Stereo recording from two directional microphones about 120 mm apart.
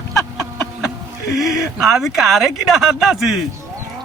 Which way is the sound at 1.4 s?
Centre (ahead or behind).